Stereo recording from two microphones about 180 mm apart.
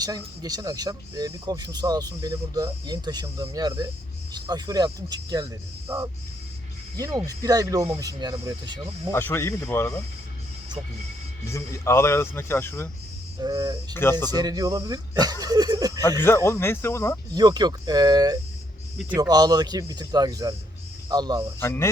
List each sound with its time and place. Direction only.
0.0 s speech: 20° right (ahead or behind)
7.3 s speech: 20° right (ahead or behind)
9.1 s speech: 15° left (ahead or behind)
11.4 s speech: 15° left (ahead or behind)
13.4 s speech: 20° right (ahead or behind)
13.9 s speech: 10° left (ahead or behind)
14.3 s speech: 20° right (ahead or behind)
16.2 s speech: 15° left (ahead or behind)
17.3 s speech: 20° right (ahead or behind)
21.6 s speech: 15° left (ahead or behind)